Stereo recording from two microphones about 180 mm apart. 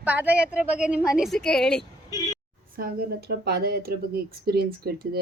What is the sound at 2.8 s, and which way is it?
Speech, 55° right (ahead or behind).